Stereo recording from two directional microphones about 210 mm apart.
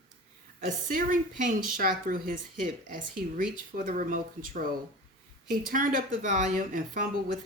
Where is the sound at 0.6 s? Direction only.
40° right (ahead or behind).